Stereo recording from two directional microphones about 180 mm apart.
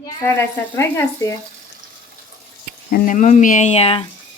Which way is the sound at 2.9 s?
45° left (ahead or behind).